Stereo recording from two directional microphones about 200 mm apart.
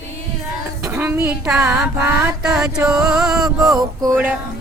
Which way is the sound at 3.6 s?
20° right (ahead or behind).